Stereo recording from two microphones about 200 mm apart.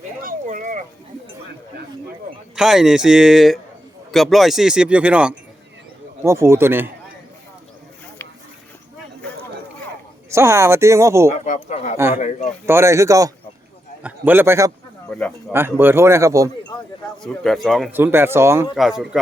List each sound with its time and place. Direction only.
0.2 s a sound: 45° right (ahead or behind)
2.6 s speech: 5° right (ahead or behind)
10.3 s speech: 15° right (ahead or behind)
11.3 s speech: 35° left (ahead or behind)
12.6 s speech: 10° right (ahead or behind)
17.2 s speech: centre (ahead or behind)
17.9 s speech: 10° right (ahead or behind)
18.8 s speech: 5° right (ahead or behind)